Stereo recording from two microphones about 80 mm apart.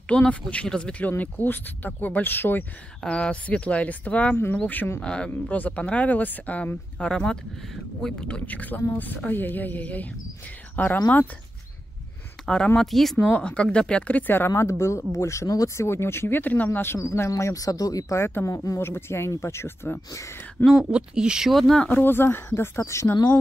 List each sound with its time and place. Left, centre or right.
0.0 s speech: centre
3.0 s speech: centre
5.0 s speech: centre
12.4 s speech: centre
13.2 s speech: centre
14.5 s speech: left
15.9 s speech: left
17.3 s speech: left
18.2 s speech: left
18.8 s speech: left
20.6 s speech: left
20.9 s speech: centre
21.8 s speech: left